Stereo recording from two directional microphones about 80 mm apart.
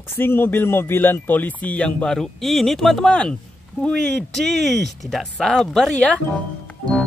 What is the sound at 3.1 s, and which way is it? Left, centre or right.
Speech, centre.